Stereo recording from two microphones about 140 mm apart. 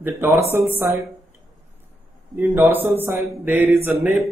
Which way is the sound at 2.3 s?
15° right (ahead or behind).